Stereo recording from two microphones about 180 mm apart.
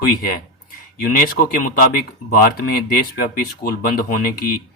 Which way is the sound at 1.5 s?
55° left (ahead or behind).